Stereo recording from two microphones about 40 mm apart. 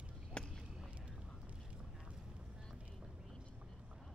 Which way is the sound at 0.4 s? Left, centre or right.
Left.